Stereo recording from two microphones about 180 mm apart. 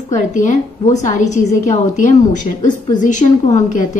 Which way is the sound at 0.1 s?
45° left (ahead or behind).